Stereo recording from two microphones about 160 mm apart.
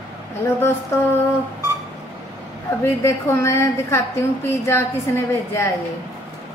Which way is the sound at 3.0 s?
15° left (ahead or behind).